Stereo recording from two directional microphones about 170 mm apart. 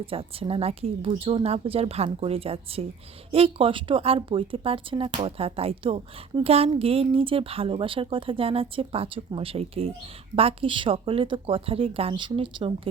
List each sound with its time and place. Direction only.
0.0 s speech: 35° right (ahead or behind)